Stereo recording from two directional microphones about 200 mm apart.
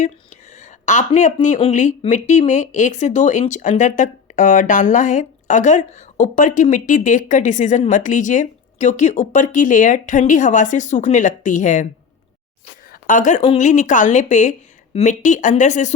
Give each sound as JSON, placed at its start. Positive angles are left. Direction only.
{"t": 0.0, "sound": "speech", "side_deg": 35}
{"t": 12.9, "sound": "speech", "side_deg": 40}